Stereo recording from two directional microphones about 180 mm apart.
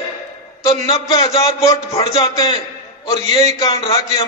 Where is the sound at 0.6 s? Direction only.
20° left (ahead or behind).